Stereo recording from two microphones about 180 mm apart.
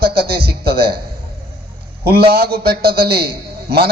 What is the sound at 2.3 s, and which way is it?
A man's voice, 60° right (ahead or behind).